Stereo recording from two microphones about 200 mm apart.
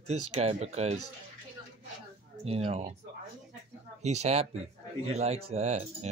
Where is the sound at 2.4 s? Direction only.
30° right (ahead or behind).